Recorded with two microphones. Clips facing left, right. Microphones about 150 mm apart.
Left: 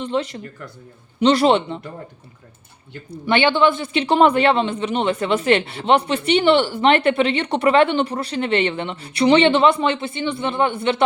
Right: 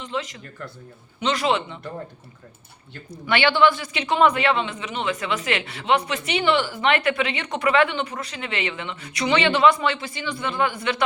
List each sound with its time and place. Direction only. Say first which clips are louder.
0.0 s speech: left 7 dB; 30° left (ahead or behind)
3.2 s speech: left 2 dB; 20° left (ahead or behind)